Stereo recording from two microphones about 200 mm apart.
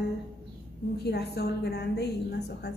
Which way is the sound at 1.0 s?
55° left (ahead or behind).